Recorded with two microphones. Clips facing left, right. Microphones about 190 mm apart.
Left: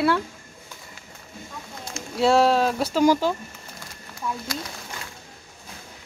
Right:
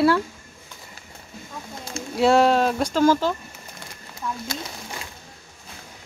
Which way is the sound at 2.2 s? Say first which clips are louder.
Right 1 dB; centre (ahead or behind).